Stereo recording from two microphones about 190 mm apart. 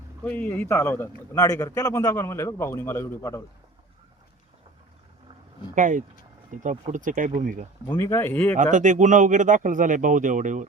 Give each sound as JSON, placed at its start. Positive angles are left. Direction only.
{"t": 0.3, "sound": "a man's voice", "side_deg": 10}
{"t": 5.7, "sound": "speech", "side_deg": -40}
{"t": 7.9, "sound": "a man's voice", "side_deg": 15}
{"t": 8.5, "sound": "speech", "side_deg": -40}